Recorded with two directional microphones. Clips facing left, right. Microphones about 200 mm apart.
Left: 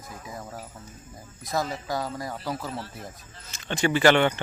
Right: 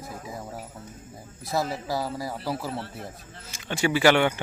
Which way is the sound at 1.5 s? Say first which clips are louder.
Right 1 dB; 5° right (ahead or behind).